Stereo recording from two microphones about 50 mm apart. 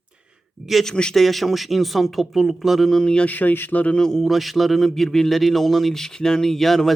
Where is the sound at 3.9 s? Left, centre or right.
Centre.